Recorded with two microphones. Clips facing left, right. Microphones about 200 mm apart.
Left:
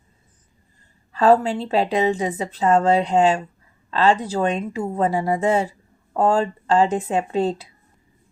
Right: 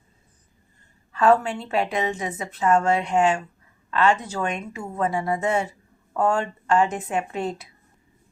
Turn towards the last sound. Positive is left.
turn(degrees=30)  # may be behind; listen again after turning